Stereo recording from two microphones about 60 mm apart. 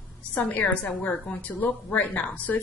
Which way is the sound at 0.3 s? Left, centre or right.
Left.